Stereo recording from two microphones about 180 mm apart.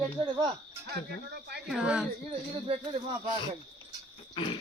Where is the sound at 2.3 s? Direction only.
30° right (ahead or behind).